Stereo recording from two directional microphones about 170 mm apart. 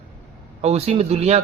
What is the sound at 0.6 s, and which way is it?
Speech, 35° right (ahead or behind).